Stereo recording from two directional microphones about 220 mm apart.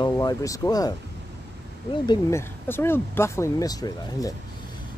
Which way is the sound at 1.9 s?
20° left (ahead or behind).